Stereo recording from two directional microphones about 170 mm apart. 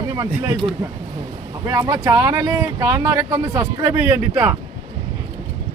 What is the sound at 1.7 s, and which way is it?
Speech, 20° right (ahead or behind).